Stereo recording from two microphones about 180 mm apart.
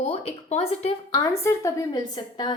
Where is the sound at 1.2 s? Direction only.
15° left (ahead or behind).